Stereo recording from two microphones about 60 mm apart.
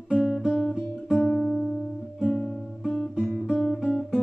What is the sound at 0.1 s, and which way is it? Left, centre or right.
Guitar, centre.